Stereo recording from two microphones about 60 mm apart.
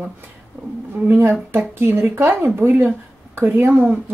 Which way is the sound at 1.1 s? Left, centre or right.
Right.